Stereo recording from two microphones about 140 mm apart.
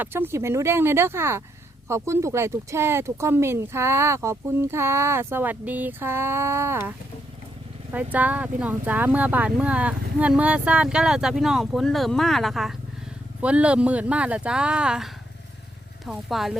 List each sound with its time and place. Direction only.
0.0 s speech: 15° right (ahead or behind)
7.9 s speech: 10° right (ahead or behind)